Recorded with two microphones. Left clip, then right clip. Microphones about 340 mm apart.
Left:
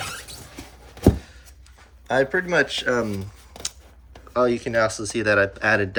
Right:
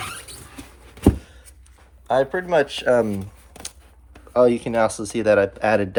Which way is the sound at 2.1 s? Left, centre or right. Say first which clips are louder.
Right 2 dB; centre.